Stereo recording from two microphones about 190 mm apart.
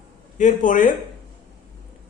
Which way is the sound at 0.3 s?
40° left (ahead or behind).